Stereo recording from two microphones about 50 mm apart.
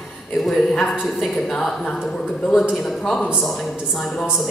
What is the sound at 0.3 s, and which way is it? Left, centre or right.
A woman's voice, centre.